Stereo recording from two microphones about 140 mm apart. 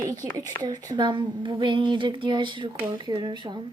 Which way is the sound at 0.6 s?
30° right (ahead or behind).